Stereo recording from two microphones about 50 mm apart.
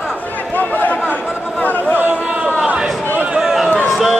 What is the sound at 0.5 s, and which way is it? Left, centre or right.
Chatter, left.